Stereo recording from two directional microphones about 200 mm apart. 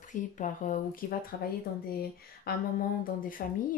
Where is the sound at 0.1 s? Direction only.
40° left (ahead or behind).